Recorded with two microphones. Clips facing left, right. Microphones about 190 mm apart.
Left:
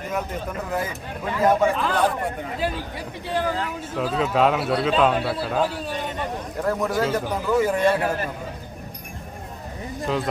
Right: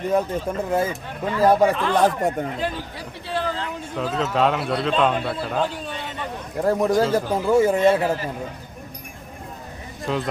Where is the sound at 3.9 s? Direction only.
5° left (ahead or behind).